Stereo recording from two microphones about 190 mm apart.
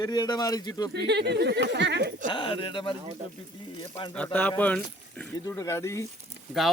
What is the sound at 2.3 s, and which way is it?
Speech, 25° left (ahead or behind).